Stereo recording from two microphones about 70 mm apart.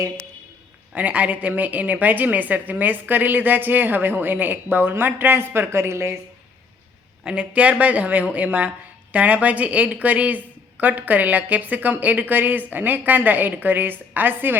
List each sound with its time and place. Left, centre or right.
0.9 s a woman's voice: right
7.3 s a woman's voice: centre